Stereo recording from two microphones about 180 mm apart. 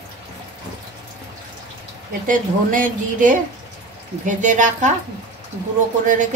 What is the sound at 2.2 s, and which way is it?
A woman's voice, 45° right (ahead or behind).